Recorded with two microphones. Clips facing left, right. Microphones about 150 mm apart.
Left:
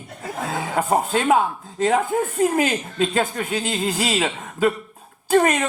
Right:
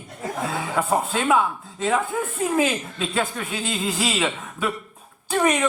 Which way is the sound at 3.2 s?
40° left (ahead or behind).